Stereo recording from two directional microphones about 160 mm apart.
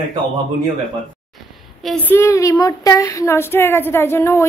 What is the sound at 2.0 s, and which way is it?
Child singing, 15° left (ahead or behind).